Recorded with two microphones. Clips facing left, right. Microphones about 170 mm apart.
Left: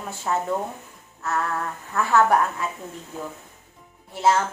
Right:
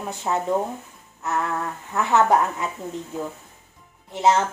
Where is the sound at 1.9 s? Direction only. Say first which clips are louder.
Right 1 dB; 20° right (ahead or behind).